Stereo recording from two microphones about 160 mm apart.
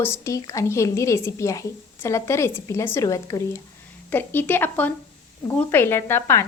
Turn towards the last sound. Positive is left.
turn(degrees=15)  # may be behind; listen again after turning